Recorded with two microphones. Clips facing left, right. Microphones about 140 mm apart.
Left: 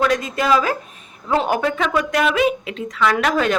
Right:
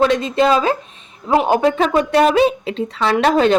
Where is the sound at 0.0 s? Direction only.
25° right (ahead or behind).